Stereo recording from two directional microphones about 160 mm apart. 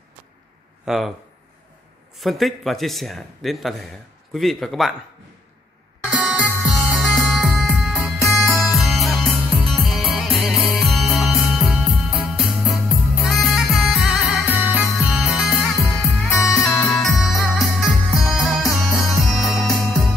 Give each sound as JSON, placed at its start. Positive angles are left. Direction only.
{"t": 0.8, "sound": "speech", "side_deg": 0}
{"t": 2.1, "sound": "speech", "side_deg": 0}
{"t": 6.1, "sound": "music", "side_deg": -10}
{"t": 16.3, "sound": "music", "side_deg": 20}
{"t": 16.9, "sound": "music", "side_deg": 0}